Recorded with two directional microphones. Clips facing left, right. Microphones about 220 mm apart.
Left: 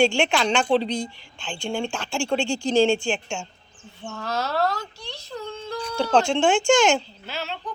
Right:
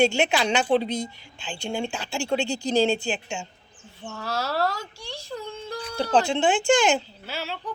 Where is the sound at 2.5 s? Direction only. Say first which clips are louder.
Left 4 dB; 40° right (ahead or behind).